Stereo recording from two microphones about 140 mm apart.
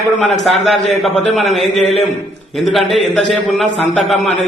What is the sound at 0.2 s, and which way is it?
A man's voice, centre (ahead or behind).